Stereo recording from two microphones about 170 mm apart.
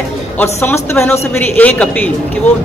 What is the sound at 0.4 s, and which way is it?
A man's voice, 15° left (ahead or behind).